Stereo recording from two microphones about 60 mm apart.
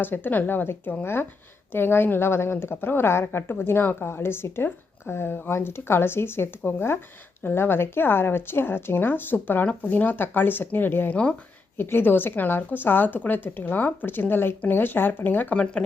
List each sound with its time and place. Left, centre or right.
0.0 s a woman's voice: left
11.1 s speech: centre
11.8 s a woman's voice: left
15.5 s speech: centre